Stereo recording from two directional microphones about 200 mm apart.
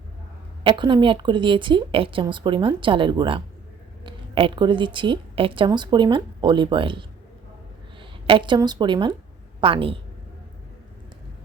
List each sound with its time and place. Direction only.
0.6 s a woman's voice: 25° right (ahead or behind)
8.3 s a woman's voice: 25° right (ahead or behind)